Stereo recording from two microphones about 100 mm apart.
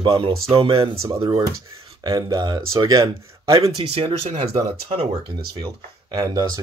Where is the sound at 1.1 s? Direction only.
50° right (ahead or behind).